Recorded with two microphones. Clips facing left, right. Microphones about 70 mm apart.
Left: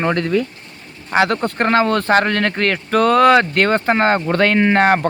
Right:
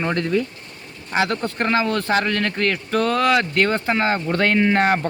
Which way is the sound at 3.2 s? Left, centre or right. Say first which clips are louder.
Left 6 dB; left.